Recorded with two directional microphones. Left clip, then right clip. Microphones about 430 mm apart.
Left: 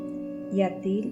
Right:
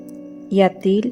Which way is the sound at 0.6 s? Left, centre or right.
Centre.